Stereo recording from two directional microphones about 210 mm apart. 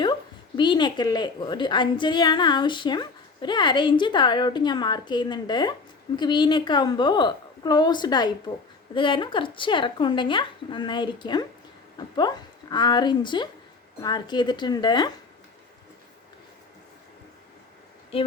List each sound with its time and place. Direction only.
0.0 s a woman's voice: 20° left (ahead or behind)